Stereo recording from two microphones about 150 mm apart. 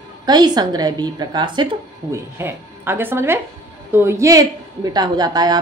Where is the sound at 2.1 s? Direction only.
15° right (ahead or behind).